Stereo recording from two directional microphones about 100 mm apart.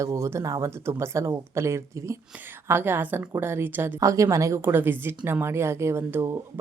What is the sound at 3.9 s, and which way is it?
Speech, 35° right (ahead or behind).